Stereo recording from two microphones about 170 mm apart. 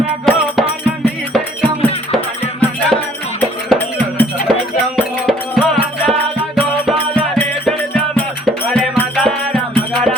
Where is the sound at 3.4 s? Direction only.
10° left (ahead or behind).